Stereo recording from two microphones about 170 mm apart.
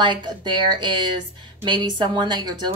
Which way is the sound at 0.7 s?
25° right (ahead or behind).